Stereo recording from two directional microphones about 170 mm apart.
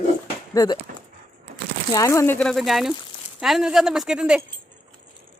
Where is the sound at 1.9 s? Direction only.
20° left (ahead or behind); by 4.4 s 5° right (ahead or behind).